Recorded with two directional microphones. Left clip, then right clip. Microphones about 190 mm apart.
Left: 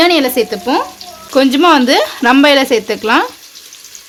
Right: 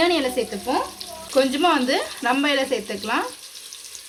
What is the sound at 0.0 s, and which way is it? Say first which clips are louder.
Speech: left 10 dB; 40° left (ahead or behind).